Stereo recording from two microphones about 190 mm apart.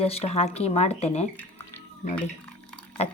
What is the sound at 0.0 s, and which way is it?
Speech, 35° left (ahead or behind).